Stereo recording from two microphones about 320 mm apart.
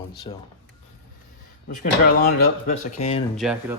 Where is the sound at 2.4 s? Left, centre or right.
Left.